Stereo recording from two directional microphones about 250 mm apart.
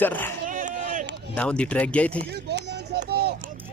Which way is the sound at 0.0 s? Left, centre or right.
Centre.